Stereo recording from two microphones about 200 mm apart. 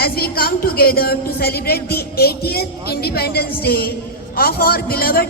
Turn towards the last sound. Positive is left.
turn(degrees=50)  # may be behind; listen again after turning